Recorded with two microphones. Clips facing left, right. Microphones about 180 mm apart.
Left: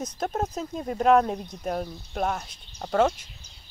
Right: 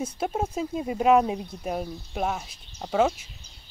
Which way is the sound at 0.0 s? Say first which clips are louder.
Right 1 dB; 10° right (ahead or behind).